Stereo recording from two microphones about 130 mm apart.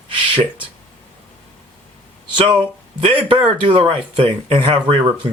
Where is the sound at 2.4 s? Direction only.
40° right (ahead or behind).